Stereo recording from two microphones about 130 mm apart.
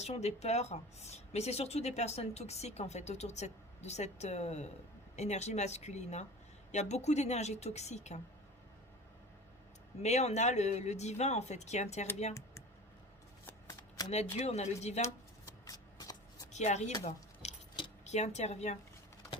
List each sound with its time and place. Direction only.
0.0 s speech: 55° left (ahead or behind)
10.0 s speech: 60° left (ahead or behind)
14.1 s speech: 55° left (ahead or behind)
15.6 s shuffling cards: 30° left (ahead or behind)
16.5 s a woman's voice: 60° left (ahead or behind)
17.0 s keys jangling: 55° left (ahead or behind)
18.0 s speech: 60° left (ahead or behind)